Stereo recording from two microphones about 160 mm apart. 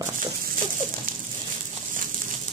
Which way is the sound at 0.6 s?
50° right (ahead or behind).